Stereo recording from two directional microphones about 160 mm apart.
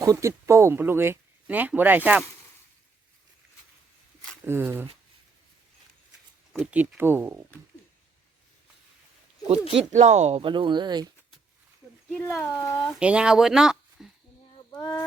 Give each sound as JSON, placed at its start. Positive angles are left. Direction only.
{"t": 0.0, "sound": "speech", "side_deg": -20}
{"t": 4.4, "sound": "speech", "side_deg": -15}
{"t": 6.5, "sound": "speech", "side_deg": -5}
{"t": 9.9, "sound": "speech", "side_deg": -45}
{"t": 12.1, "sound": "speech", "side_deg": 10}
{"t": 13.0, "sound": "speech", "side_deg": -5}